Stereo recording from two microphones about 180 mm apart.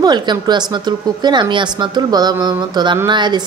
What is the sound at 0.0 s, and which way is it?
A woman's voice, 25° right (ahead or behind).